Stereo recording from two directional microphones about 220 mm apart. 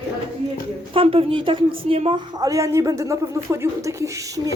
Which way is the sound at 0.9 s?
25° right (ahead or behind).